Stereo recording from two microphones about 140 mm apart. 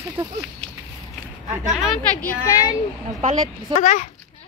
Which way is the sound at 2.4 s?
25° left (ahead or behind).